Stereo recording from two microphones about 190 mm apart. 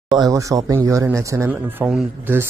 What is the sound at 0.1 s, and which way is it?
Speech, 20° right (ahead or behind).